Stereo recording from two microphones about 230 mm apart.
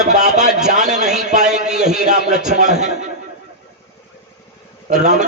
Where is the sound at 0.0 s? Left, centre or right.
Right.